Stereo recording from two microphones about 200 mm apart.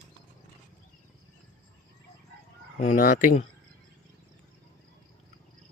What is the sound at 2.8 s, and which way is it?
Speech, 40° left (ahead or behind).